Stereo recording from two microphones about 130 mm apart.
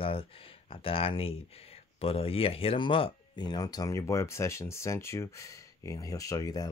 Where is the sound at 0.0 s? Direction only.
45° left (ahead or behind).